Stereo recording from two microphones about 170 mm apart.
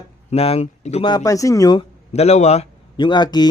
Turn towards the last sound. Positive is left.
turn(degrees=25)  # may be behind; listen again after turning